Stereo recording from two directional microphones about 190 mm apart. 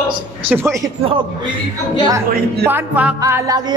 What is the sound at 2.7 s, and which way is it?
Speech, 10° right (ahead or behind).